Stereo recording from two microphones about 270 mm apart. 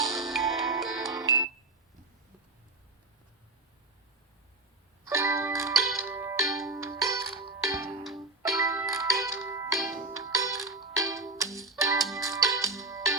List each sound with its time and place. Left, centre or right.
0.0 s music: centre
5.0 s music: centre
5.7 s music: centre
11.5 s music: centre
11.8 s music: centre